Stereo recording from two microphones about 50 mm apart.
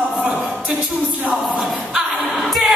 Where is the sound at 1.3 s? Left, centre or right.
Centre.